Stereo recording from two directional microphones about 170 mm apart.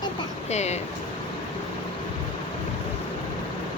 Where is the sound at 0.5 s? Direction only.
40° left (ahead or behind).